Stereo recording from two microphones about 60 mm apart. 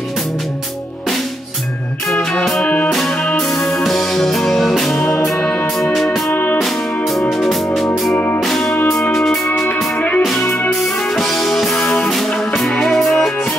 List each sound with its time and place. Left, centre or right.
2.6 s music: left
3.3 s music: centre
6.3 s music: left
6.6 s music: centre
8.1 s music: left
8.4 s music: centre
9.9 s music: left
10.7 s music: centre